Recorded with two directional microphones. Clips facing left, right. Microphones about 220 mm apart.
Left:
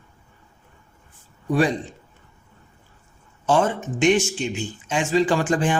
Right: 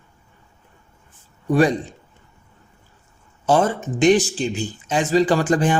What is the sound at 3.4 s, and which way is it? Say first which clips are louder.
Speech: right 2 dB; 40° right (ahead or behind).